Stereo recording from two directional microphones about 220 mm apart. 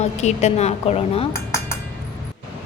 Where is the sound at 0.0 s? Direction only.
30° left (ahead or behind).